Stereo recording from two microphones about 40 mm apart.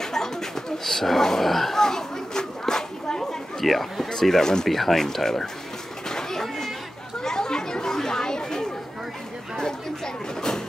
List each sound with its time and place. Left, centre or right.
0.0 s a sound: centre
4.1 s speech: centre
4.6 s speech: centre
6.0 s cat: centre
7.2 s chatter: centre
9.6 s a sound: centre